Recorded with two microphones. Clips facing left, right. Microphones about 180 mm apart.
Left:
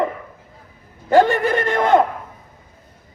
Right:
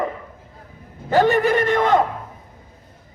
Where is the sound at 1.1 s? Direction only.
55° left (ahead or behind).